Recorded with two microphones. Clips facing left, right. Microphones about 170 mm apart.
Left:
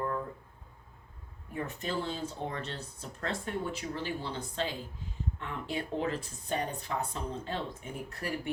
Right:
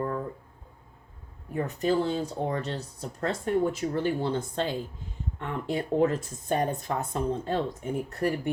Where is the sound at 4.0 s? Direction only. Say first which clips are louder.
Right 9 dB; 50° right (ahead or behind).